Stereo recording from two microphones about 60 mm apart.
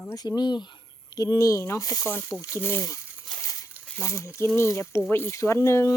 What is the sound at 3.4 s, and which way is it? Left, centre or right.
Crumpling, left.